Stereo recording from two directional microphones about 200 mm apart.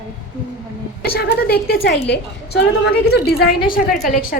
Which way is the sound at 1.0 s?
50° left (ahead or behind).